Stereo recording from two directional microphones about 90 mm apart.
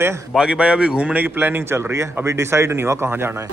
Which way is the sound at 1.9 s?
30° right (ahead or behind).